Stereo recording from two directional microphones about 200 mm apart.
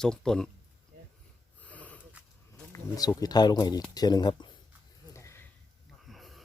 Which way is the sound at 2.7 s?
15° left (ahead or behind).